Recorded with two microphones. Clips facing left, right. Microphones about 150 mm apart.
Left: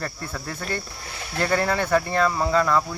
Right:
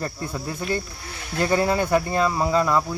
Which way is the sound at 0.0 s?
20° right (ahead or behind).